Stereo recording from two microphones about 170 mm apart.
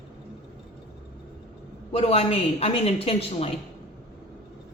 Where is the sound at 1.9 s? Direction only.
35° left (ahead or behind).